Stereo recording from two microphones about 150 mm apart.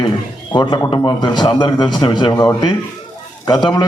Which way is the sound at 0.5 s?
30° left (ahead or behind).